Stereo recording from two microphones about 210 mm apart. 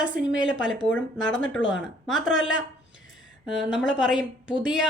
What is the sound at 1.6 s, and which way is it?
Speech, 20° right (ahead or behind).